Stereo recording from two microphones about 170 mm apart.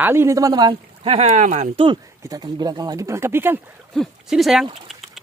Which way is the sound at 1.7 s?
25° right (ahead or behind).